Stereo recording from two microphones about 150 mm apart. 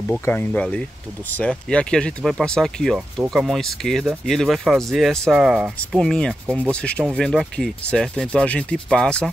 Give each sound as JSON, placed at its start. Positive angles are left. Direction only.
{"t": 0.2, "sound": "speech", "side_deg": 10}